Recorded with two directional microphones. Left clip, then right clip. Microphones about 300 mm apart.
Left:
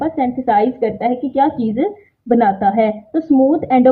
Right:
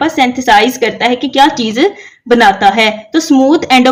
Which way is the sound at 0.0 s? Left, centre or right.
Centre.